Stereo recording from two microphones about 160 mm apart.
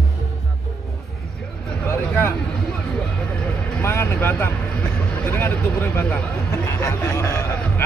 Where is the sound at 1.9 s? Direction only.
10° left (ahead or behind).